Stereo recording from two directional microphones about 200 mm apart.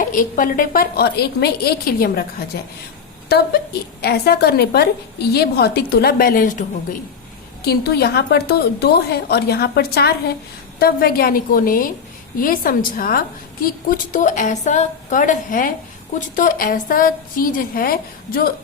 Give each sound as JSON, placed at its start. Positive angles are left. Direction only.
{"t": 0.0, "sound": "a woman's voice", "side_deg": 45}